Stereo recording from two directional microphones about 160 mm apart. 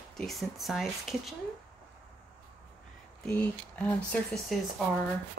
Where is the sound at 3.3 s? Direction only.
10° left (ahead or behind).